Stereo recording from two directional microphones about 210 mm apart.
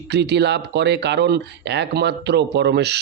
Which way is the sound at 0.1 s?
55° right (ahead or behind).